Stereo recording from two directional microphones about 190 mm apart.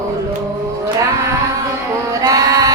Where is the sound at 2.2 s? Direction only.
15° right (ahead or behind).